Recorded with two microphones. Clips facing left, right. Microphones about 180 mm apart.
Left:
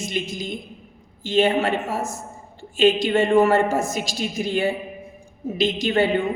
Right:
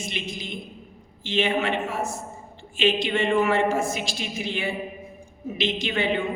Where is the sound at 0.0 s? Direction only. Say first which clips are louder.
Left 5 dB; 40° left (ahead or behind).